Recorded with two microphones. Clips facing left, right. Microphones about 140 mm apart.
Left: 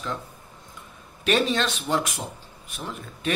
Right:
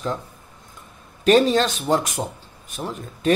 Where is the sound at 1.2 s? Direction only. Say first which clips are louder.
Right 7 dB; 40° right (ahead or behind).